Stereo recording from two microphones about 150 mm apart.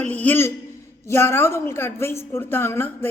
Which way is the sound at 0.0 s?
10° left (ahead or behind).